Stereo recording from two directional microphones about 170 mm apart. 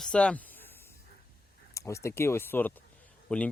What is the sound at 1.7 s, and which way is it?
A man's voice, 20° left (ahead or behind).